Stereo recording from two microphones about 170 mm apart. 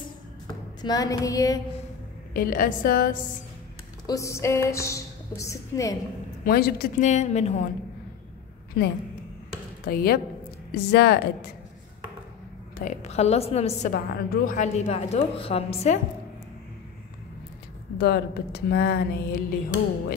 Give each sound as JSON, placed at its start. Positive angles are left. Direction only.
{"t": 0.8, "sound": "child singing", "side_deg": 20}
{"t": 2.3, "sound": "a woman's voice", "side_deg": 55}
{"t": 4.0, "sound": "a woman's voice", "side_deg": 20}
{"t": 6.4, "sound": "a woman's voice", "side_deg": 60}
{"t": 7.1, "sound": "a woman's voice", "side_deg": 40}
{"t": 8.8, "sound": "a woman's voice", "side_deg": 70}
{"t": 10.7, "sound": "speech", "side_deg": 70}
{"t": 12.7, "sound": "a woman's voice", "side_deg": 45}
{"t": 13.9, "sound": "a woman's voice", "side_deg": 65}
{"t": 17.9, "sound": "speech", "side_deg": 70}